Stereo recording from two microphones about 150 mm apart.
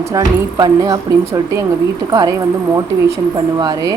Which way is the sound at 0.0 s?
25° right (ahead or behind).